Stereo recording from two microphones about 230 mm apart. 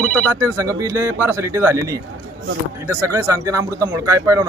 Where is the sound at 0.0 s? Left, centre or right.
Centre.